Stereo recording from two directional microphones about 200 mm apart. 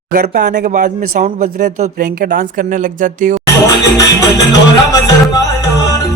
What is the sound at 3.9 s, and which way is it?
Music, 15° left (ahead or behind).